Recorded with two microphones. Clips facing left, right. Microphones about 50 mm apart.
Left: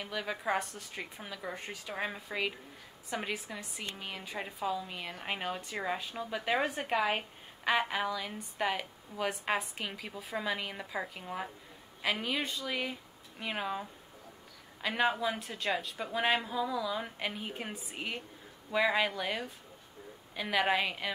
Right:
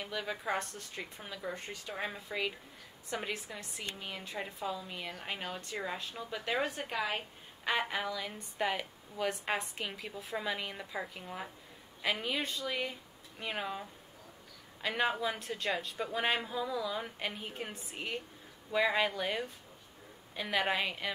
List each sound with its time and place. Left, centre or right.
0.0 s a woman's voice: centre; by 7.2 s left
7.6 s speech: centre